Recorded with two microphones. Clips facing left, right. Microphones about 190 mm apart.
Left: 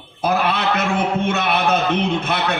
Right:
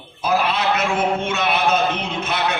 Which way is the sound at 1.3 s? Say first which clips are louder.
Left 1 dB; 60° left (ahead or behind).